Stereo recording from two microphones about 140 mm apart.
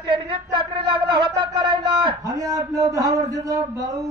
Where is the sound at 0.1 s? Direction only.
35° right (ahead or behind).